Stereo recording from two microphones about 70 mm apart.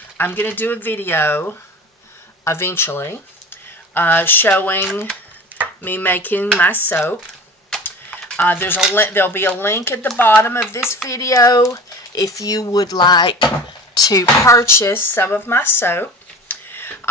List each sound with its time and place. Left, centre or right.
0.2 s speech: left
8.4 s speech: left
11.1 s speech: left
14.0 s speech: left